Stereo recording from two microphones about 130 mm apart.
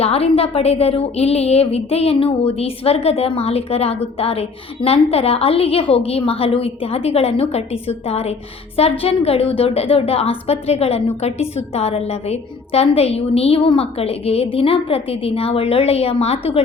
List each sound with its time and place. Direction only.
0.0 s a woman's voice: 50° left (ahead or behind)